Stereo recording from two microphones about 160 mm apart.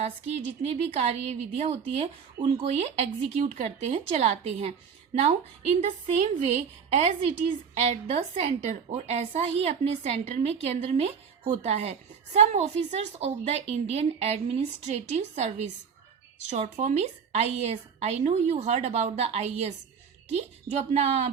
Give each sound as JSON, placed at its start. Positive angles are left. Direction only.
{"t": 0.0, "sound": "a woman's voice", "side_deg": -45}
{"t": 5.8, "sound": "a woman's voice", "side_deg": -45}